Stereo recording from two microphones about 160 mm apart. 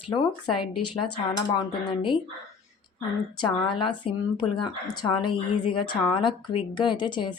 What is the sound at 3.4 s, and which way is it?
Speech, 30° left (ahead or behind).